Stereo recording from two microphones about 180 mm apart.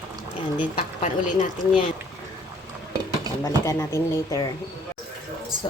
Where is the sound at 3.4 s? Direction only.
15° left (ahead or behind).